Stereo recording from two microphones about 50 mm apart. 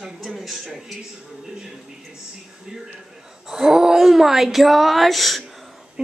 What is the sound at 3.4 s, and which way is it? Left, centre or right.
A child's voice, centre.